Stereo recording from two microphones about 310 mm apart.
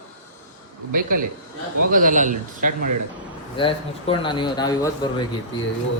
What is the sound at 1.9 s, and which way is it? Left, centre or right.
Speech, right.